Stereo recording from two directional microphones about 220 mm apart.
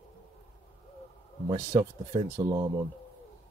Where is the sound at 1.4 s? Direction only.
10° right (ahead or behind).